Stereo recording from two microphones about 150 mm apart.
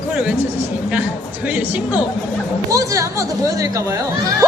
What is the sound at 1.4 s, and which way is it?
A man's voice, 10° right (ahead or behind).